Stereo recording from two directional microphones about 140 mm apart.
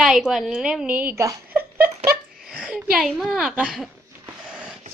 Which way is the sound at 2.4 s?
5° right (ahead or behind).